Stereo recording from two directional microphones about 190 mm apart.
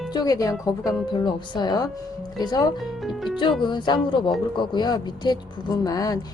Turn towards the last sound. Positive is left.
turn(degrees=20)  # may be behind; listen again after turning